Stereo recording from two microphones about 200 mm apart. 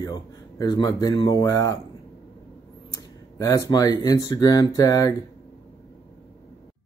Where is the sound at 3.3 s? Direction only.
15° left (ahead or behind).